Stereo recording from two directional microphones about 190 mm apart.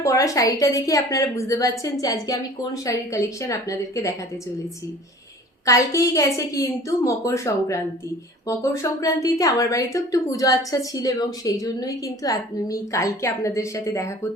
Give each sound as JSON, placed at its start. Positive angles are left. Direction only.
{"t": 0.0, "sound": "a woman's voice", "side_deg": 15}
{"t": 5.6, "sound": "a woman's voice", "side_deg": 15}